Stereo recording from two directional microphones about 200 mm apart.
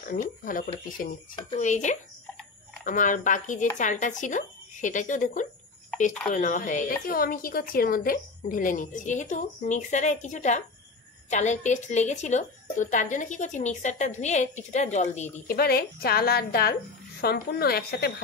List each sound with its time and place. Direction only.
0.0 s a woman's voice: 45° left (ahead or behind)
15.4 s a woman's voice: 50° left (ahead or behind)